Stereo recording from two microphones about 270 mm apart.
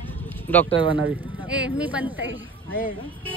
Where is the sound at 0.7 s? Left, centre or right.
Centre.